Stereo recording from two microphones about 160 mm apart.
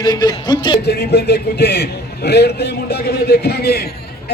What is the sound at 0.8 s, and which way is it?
A man's voice, 90° left.